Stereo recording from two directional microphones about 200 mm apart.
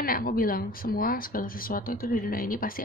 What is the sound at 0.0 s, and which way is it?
Speech, 45° left (ahead or behind).